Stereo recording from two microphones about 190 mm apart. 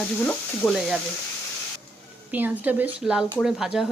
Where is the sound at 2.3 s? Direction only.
10° right (ahead or behind).